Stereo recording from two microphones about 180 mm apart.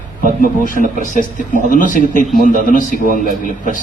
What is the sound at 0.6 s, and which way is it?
Speech, 50° left (ahead or behind).